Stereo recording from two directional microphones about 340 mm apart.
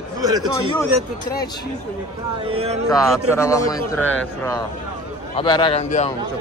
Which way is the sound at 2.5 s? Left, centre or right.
Centre.